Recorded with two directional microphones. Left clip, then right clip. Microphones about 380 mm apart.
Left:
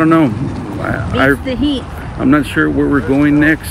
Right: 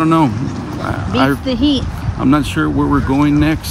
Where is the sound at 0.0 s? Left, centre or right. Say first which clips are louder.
Left 2 dB; centre.